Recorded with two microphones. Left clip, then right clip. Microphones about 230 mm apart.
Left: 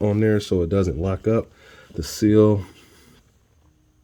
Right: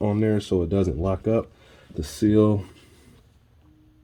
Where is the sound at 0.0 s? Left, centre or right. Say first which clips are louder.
Left 3 dB; left.